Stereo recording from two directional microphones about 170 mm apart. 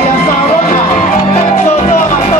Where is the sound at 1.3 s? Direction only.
40° left (ahead or behind).